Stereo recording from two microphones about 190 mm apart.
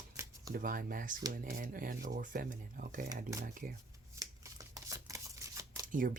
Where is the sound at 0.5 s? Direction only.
50° right (ahead or behind).